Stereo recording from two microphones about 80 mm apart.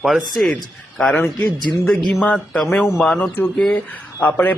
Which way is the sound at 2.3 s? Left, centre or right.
Centre.